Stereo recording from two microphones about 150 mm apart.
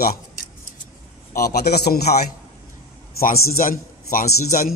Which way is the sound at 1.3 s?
90° left.